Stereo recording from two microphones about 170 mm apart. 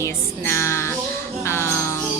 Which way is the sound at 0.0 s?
15° left (ahead or behind).